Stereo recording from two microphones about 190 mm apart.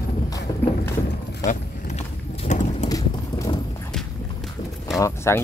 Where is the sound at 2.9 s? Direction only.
15° left (ahead or behind).